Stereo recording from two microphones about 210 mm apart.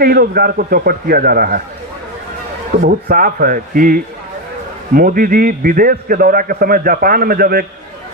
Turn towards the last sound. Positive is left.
turn(degrees=-45)  # may be behind; listen again after turning